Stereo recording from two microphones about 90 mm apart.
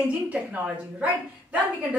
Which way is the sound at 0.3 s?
15° right (ahead or behind).